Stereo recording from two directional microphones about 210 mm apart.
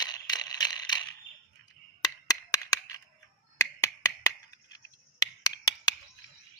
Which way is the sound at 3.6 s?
15° left (ahead or behind).